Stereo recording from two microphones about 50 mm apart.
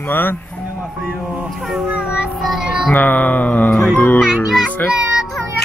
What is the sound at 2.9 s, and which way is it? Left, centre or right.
Mantra, left.